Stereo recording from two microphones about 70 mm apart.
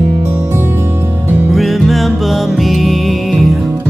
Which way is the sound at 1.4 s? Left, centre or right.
Centre.